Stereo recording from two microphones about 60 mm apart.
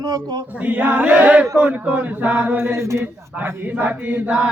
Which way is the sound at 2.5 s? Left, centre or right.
Right.